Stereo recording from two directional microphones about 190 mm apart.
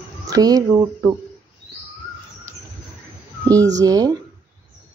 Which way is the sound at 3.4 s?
20° right (ahead or behind).